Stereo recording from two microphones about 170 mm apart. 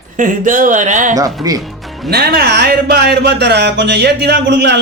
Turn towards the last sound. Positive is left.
turn(degrees=-85)